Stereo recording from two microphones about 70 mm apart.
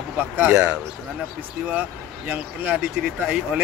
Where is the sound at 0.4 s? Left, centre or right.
Right.